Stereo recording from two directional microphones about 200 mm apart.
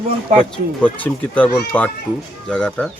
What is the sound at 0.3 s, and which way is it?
Speech, 35° right (ahead or behind).